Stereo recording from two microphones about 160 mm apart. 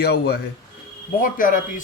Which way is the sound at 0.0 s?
75° left (ahead or behind).